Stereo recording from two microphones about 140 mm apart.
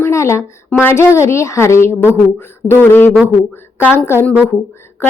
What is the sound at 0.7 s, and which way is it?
A woman's voice, 15° left (ahead or behind).